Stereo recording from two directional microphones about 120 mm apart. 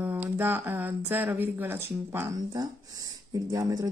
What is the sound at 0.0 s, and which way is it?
Speech, 15° right (ahead or behind).